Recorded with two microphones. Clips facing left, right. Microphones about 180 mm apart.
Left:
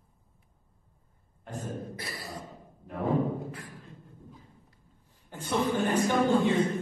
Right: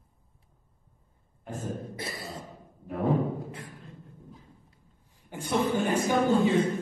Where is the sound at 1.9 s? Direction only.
25° right (ahead or behind).